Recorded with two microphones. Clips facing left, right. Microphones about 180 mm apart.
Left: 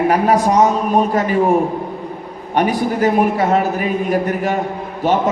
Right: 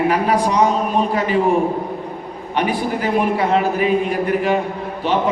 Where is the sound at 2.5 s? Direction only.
45° left (ahead or behind).